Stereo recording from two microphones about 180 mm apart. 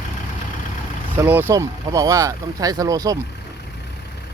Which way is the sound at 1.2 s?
10° right (ahead or behind).